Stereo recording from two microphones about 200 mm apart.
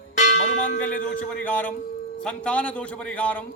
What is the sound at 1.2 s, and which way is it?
A man's voice, 5° left (ahead or behind).